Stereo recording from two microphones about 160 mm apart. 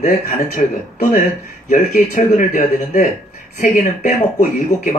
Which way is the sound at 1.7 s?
55° left (ahead or behind).